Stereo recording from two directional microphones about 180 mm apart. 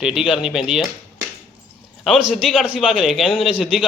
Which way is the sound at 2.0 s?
Centre (ahead or behind).